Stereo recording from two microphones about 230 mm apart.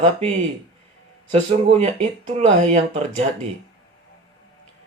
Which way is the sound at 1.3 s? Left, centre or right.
Right.